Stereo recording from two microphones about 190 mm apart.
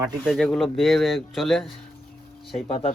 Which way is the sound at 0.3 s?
Centre (ahead or behind).